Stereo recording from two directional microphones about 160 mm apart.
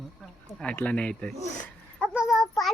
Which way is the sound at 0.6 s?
10° left (ahead or behind).